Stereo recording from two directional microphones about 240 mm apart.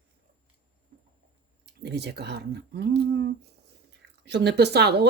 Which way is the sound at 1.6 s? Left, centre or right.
Right.